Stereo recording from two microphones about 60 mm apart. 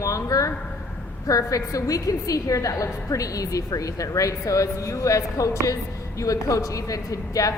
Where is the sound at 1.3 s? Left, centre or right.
Left.